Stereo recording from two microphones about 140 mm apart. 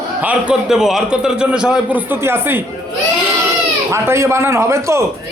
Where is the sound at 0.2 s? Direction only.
10° right (ahead or behind).